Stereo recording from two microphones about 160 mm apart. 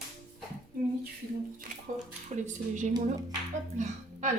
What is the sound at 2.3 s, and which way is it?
A woman's voice, 50° right (ahead or behind).